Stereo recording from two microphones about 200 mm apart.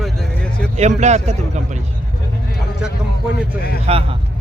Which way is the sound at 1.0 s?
35° right (ahead or behind).